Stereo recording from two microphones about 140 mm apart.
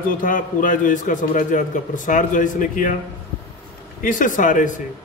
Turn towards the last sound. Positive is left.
turn(degrees=65)  # may be behind; listen again after turning